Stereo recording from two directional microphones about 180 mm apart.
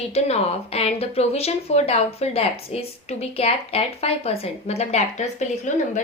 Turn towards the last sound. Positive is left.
turn(degrees=40)  # may be behind; listen again after turning